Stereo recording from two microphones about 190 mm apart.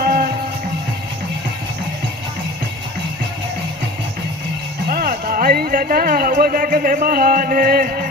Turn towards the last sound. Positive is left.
turn(degrees=-50)  # may be behind; listen again after turning